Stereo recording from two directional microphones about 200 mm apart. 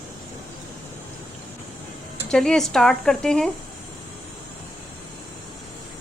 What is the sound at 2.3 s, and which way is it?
A woman's voice, 5° left (ahead or behind).